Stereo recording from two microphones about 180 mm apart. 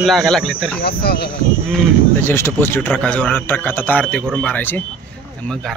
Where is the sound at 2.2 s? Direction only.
15° left (ahead or behind).